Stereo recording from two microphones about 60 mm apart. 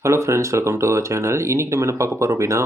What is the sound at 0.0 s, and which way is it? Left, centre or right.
Speech, right.